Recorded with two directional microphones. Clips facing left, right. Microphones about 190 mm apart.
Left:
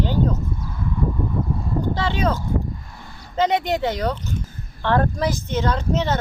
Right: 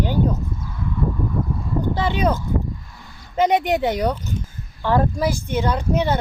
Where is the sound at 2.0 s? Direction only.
15° right (ahead or behind).